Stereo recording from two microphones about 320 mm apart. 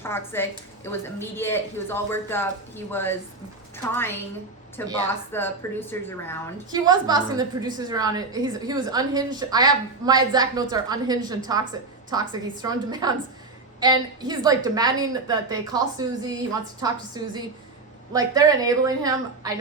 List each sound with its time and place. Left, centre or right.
0.0 s a woman's voice: centre
4.8 s speech: centre
6.7 s a woman's voice: centre